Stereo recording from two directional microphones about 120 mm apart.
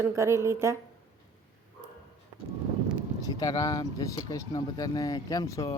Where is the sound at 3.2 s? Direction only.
30° left (ahead or behind).